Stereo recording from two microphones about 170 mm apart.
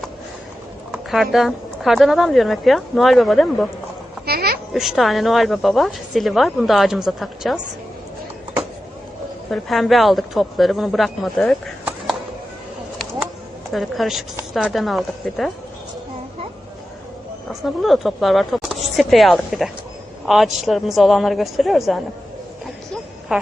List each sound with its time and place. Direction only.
0.9 s a woman's voice: centre (ahead or behind)
4.3 s a sound: 65° right (ahead or behind)
4.7 s a woman's voice: centre (ahead or behind)
9.5 s a woman's voice: centre (ahead or behind)
13.7 s a woman's voice: centre (ahead or behind)
17.5 s a woman's voice: centre (ahead or behind)
23.3 s a woman's voice: 5° right (ahead or behind)